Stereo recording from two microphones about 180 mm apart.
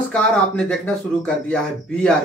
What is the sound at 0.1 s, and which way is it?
Speech, 5° left (ahead or behind).